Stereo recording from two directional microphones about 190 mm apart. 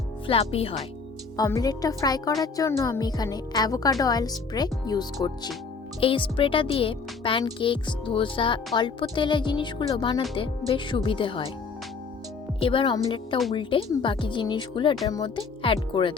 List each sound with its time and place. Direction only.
0.3 s speech: 30° left (ahead or behind)
1.4 s speech: 20° left (ahead or behind)
12.5 s speech: 25° left (ahead or behind)